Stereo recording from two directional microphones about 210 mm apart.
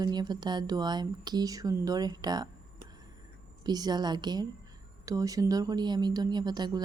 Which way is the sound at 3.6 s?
20° right (ahead or behind).